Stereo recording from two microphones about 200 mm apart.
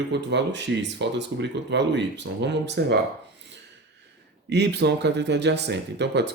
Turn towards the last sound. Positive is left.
turn(degrees=-60)  # may be behind; listen again after turning